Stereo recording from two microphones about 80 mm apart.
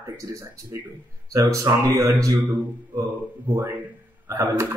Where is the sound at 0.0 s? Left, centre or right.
Right.